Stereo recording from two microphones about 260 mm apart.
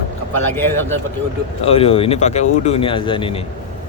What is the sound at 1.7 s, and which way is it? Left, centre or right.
Speech, left.